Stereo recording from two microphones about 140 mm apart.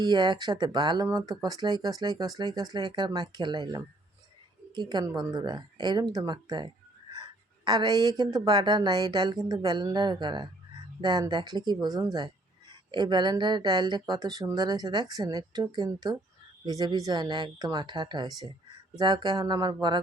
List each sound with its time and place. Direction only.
0.0 s speech: 30° right (ahead or behind)